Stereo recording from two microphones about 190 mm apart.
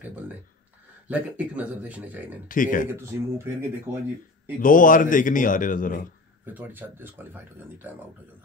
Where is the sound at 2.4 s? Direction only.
45° left (ahead or behind).